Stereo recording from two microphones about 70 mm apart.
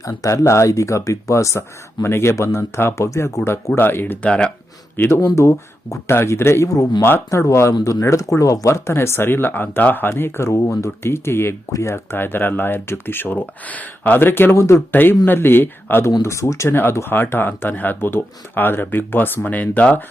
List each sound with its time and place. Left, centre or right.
0.0 s speech: left; by 4.5 s centre
4.9 s speech: left
7.7 s speech: left
8.0 s speech: left
12.1 s speech: left
16.2 s speech: left